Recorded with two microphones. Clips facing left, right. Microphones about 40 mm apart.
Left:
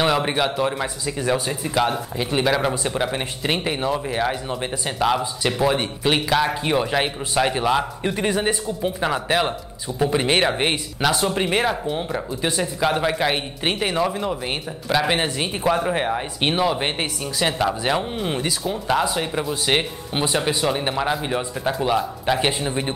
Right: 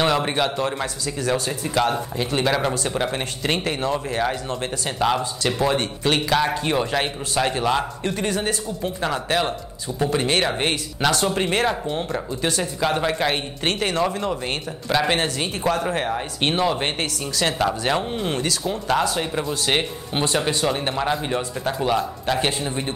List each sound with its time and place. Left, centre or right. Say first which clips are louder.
0.0 s speech: even; centre
17.0 s speech: even; centre
17.6 s speech: even; centre